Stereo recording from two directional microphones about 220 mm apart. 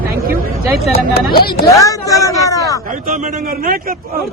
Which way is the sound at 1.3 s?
45° left (ahead or behind).